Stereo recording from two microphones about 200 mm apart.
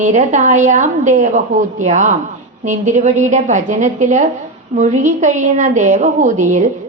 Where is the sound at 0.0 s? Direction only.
35° right (ahead or behind).